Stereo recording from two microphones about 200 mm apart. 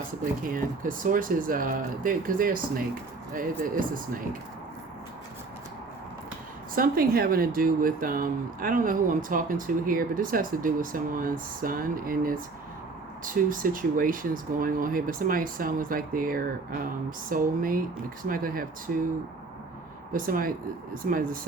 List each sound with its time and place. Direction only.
0.5 s speech: 40° right (ahead or behind)
6.7 s speech: 50° right (ahead or behind)
20.1 s speech: 45° right (ahead or behind)